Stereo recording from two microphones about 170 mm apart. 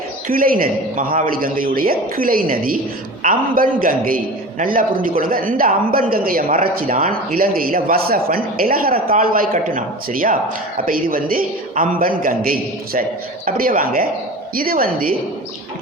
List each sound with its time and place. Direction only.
0.3 s a man's voice: 55° right (ahead or behind)